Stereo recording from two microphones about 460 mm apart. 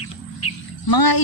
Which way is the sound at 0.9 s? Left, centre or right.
Left.